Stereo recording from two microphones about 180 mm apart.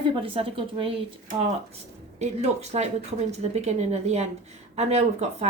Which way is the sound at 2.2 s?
40° right (ahead or behind).